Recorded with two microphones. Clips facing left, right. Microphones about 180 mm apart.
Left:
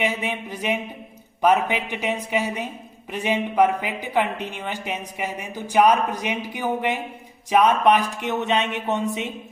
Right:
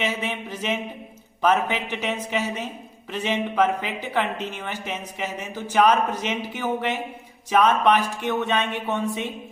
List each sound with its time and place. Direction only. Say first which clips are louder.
0.0 s speech: left 2 dB; 15° left (ahead or behind)